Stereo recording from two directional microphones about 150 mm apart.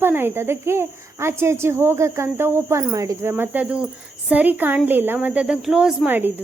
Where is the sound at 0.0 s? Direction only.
15° right (ahead or behind).